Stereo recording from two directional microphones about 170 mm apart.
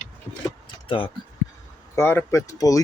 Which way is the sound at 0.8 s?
30° left (ahead or behind).